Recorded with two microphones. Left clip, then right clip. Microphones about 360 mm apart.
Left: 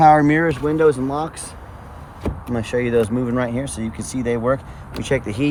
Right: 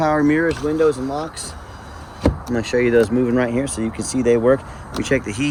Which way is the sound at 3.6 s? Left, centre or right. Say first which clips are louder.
Right 4 dB; centre.